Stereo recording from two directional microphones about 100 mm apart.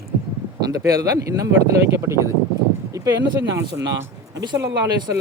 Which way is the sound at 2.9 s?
35° right (ahead or behind).